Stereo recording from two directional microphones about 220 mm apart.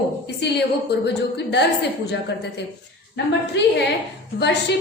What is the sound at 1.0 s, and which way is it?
Speech, 50° left (ahead or behind).